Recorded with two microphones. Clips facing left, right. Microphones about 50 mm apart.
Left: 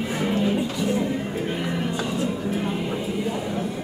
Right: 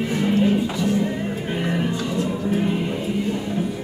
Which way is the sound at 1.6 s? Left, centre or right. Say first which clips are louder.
Right 3 dB; centre.